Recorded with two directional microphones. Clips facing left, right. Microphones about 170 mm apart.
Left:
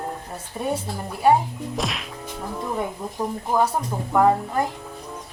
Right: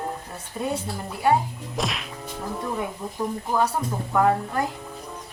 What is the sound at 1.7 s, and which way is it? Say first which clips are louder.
Whack: right 1 dB; centre (ahead or behind).